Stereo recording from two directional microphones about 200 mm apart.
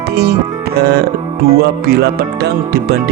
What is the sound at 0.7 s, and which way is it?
Music, 50° right (ahead or behind).